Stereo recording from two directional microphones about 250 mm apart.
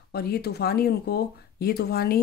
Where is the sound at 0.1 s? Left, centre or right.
Left.